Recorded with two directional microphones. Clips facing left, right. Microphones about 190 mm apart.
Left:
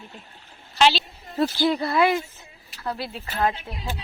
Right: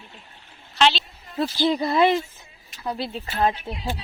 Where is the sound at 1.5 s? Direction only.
15° right (ahead or behind).